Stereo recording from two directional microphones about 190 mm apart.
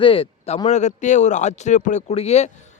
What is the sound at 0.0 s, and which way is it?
A man's voice, 30° left (ahead or behind).